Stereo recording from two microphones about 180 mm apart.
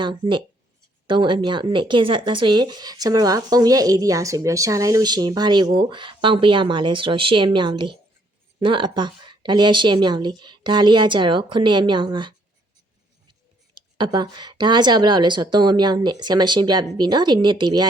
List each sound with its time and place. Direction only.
0.0 s speech: 25° right (ahead or behind)
13.7 s speech: 25° right (ahead or behind)